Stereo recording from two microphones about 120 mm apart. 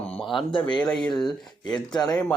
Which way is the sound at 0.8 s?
10° left (ahead or behind).